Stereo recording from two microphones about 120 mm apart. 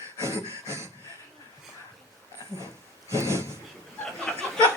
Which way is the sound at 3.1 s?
25° right (ahead or behind).